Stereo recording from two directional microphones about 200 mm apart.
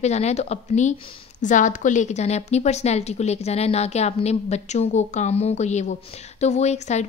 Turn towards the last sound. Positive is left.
turn(degrees=35)  # may be behind; listen again after turning